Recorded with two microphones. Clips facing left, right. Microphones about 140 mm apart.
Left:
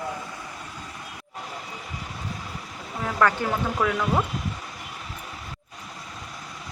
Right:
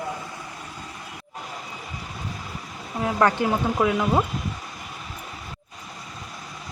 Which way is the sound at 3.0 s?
20° right (ahead or behind).